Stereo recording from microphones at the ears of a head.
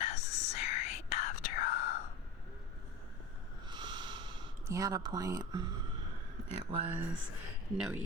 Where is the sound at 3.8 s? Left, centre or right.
Right.